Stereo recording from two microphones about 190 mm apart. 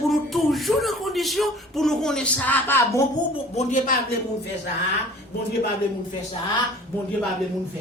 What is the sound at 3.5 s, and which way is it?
Speech, 40° left (ahead or behind).